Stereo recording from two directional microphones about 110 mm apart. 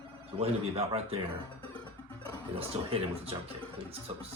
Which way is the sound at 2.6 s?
60° right (ahead or behind).